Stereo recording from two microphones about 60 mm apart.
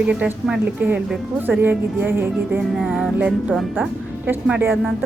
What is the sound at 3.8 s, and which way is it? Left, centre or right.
Speech, right.